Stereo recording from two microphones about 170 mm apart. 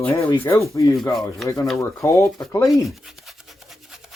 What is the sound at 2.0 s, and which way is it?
Speech, 20° left (ahead or behind).